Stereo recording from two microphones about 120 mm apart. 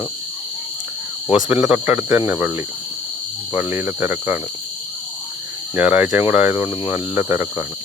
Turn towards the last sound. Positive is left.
turn(degrees=-20)  # may be behind; listen again after turning